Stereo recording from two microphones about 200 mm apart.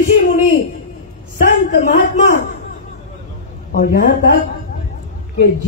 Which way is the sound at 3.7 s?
50° left (ahead or behind).